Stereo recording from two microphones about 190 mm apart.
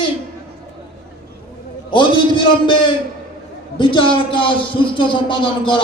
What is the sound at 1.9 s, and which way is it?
Speech, 25° left (ahead or behind).